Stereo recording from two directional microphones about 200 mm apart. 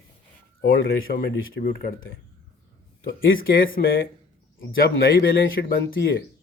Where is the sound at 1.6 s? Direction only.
45° left (ahead or behind).